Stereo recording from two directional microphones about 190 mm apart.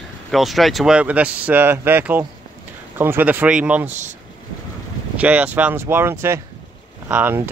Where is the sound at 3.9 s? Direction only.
40° right (ahead or behind).